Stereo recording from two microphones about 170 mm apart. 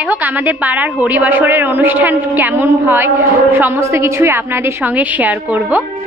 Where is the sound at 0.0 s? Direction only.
10° right (ahead or behind).